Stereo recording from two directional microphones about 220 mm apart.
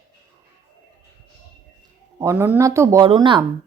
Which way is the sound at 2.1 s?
15° right (ahead or behind).